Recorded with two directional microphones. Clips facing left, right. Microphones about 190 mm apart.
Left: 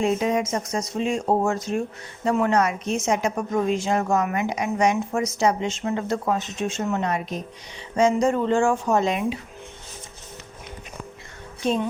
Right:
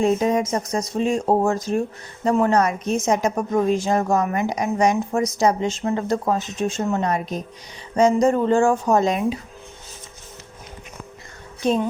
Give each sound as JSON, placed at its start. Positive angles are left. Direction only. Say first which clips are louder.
{"t": 0.0, "sound": "a woman's voice", "louder": "right 3 dB", "side_deg": -40}